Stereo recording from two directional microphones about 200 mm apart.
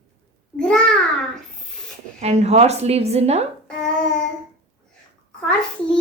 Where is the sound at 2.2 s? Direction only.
30° right (ahead or behind).